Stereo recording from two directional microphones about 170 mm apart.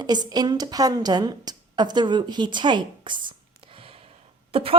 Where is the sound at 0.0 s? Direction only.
25° right (ahead or behind).